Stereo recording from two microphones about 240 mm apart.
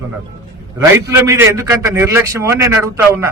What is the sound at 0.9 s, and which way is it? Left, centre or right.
A man's voice, centre.